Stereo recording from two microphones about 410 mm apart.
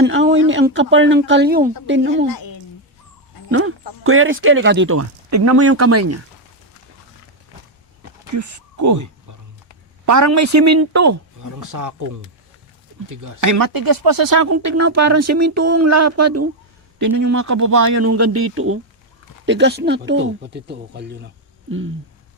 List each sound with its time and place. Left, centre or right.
0.0 s speech: right
2.3 s a sound: left
3.5 s speech: right
8.3 s speech: right
10.1 s speech: right
13.1 s speech: right